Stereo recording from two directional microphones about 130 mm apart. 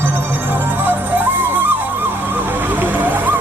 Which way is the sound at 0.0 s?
15° right (ahead or behind).